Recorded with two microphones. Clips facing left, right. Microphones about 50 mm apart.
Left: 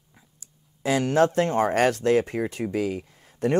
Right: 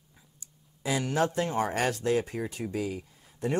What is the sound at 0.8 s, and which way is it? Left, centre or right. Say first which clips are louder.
Speech: left 7 dB; left.